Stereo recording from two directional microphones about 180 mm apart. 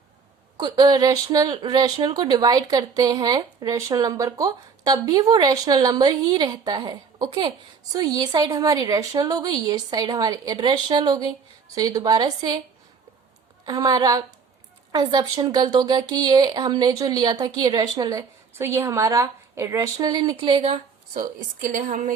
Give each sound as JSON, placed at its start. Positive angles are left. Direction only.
{"t": 0.5, "sound": "speech", "side_deg": -20}
{"t": 13.7, "sound": "speech", "side_deg": -20}
{"t": 21.2, "sound": "a woman's voice", "side_deg": -45}